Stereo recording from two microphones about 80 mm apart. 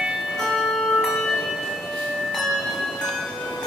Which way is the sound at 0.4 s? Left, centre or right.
Centre.